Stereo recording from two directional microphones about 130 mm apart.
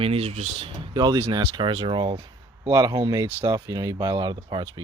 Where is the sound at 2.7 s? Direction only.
25° right (ahead or behind).